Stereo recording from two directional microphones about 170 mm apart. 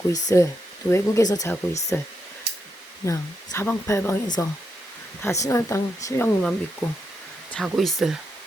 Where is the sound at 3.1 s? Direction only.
15° left (ahead or behind).